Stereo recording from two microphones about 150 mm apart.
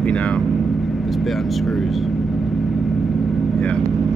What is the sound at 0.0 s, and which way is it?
Speech, 5° left (ahead or behind).